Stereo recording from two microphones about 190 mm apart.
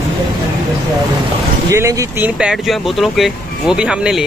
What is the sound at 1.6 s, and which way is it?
Speech, 15° right (ahead or behind).